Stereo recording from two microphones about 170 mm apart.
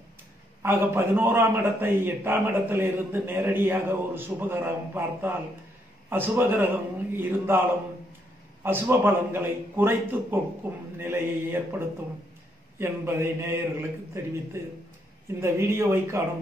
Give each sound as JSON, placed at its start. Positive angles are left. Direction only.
{"t": 0.6, "sound": "a man's voice", "side_deg": -15}
{"t": 8.6, "sound": "a man's voice", "side_deg": -10}
{"t": 12.7, "sound": "a man's voice", "side_deg": -15}